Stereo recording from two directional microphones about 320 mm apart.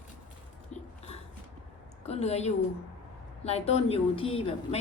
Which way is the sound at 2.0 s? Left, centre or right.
Centre.